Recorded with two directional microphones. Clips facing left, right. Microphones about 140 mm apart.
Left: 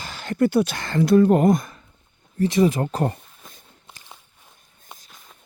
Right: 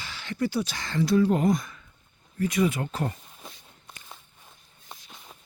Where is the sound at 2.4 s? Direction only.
35° left (ahead or behind).